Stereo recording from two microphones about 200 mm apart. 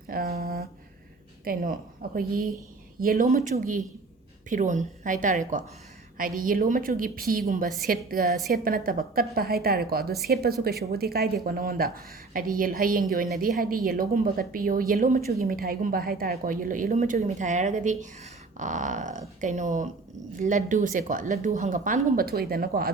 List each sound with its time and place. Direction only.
0.1 s a sound: 50° right (ahead or behind)
1.5 s speech: 45° right (ahead or behind)
3.2 s speech: 35° right (ahead or behind)